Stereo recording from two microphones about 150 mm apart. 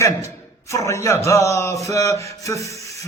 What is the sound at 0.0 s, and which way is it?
A man's voice, 20° left (ahead or behind).